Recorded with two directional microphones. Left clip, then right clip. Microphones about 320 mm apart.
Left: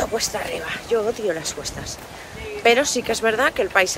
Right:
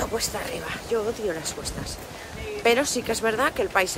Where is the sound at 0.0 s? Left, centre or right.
Centre.